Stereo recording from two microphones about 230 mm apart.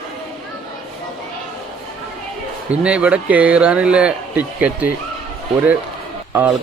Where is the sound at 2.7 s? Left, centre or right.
Centre.